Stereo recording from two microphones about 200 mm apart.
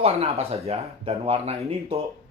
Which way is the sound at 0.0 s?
30° right (ahead or behind).